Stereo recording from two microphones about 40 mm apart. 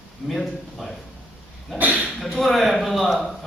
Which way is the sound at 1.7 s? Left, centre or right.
Right.